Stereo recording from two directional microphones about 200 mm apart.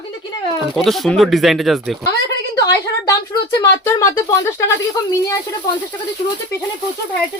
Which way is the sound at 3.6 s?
15° left (ahead or behind).